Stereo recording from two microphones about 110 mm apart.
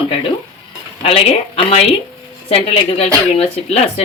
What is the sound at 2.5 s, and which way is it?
Speech, 65° left (ahead or behind).